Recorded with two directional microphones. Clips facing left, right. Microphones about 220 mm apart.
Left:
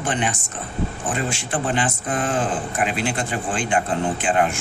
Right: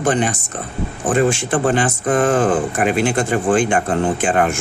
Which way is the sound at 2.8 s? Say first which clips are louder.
Right 7 dB; 50° right (ahead or behind).